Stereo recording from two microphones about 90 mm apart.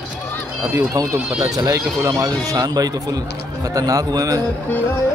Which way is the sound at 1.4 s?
45° right (ahead or behind).